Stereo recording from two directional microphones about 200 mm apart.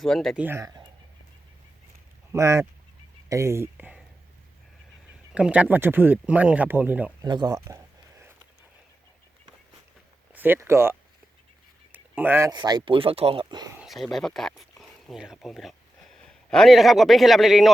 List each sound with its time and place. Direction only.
0.0 s speech: centre (ahead or behind)
0.4 s speech: 15° right (ahead or behind)
2.3 s speech: 15° right (ahead or behind)
5.3 s speech: 5° right (ahead or behind)
7.3 s speech: 20° right (ahead or behind)
10.3 s speech: 10° right (ahead or behind)
13.7 s speech: centre (ahead or behind)